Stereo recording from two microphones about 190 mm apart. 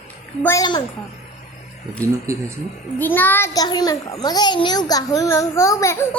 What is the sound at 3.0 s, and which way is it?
A child's voice, 10° left (ahead or behind).